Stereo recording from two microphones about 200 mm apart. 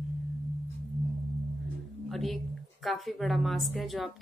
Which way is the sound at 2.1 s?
Centre (ahead or behind).